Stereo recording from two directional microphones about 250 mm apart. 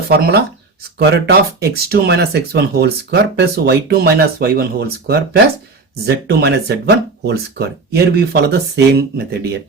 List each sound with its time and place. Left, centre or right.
0.1 s speech: right